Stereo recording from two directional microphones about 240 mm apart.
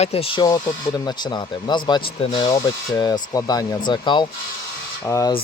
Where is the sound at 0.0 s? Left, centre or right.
Left.